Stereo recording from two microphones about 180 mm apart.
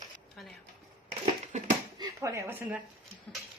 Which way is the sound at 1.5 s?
40° right (ahead or behind).